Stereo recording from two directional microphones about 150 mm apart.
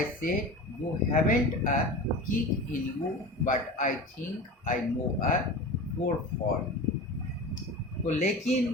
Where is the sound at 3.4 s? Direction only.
60° left (ahead or behind).